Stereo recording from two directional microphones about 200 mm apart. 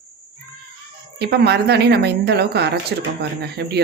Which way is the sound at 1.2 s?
55° right (ahead or behind).